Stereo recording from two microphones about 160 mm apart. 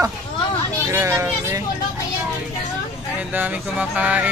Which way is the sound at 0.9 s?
15° right (ahead or behind).